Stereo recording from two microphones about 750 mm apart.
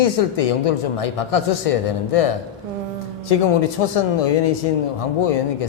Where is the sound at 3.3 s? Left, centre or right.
Left.